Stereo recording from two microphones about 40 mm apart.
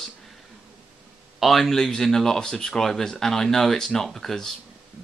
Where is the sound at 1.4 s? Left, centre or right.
Centre.